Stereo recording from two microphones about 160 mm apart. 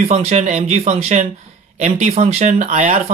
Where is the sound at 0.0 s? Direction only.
40° right (ahead or behind).